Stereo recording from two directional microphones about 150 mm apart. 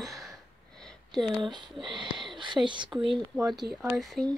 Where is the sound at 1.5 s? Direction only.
30° right (ahead or behind).